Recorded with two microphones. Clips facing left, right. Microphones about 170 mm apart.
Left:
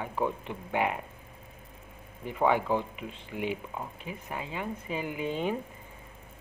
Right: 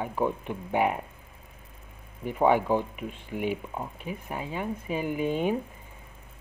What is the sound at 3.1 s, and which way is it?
Speech, 50° right (ahead or behind).